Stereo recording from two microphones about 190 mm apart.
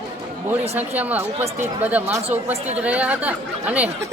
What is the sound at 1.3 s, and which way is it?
Speech, 35° right (ahead or behind).